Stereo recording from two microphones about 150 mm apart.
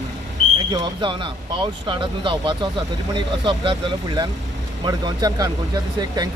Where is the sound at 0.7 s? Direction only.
30° right (ahead or behind).